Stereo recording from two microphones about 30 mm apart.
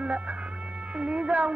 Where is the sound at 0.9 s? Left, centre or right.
Right.